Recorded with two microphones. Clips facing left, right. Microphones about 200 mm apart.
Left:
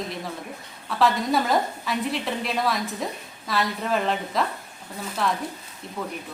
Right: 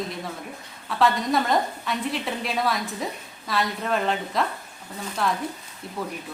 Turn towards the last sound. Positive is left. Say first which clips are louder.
# right 1 dB
turn(degrees=-5)  # may be behind; listen again after turning